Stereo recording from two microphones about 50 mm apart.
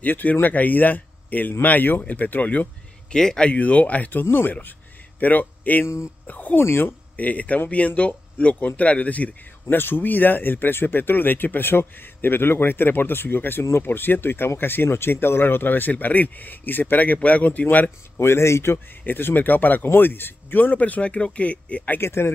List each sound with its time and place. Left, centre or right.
0.0 s speech: left
3.1 s speech: centre
3.5 s speech: left
6.6 s speech: left
7.2 s speech: left
9.8 s speech: left
18.2 s speech: left
19.0 s speech: left
22.0 s speech: left